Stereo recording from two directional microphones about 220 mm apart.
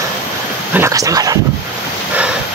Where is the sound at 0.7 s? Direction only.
15° right (ahead or behind).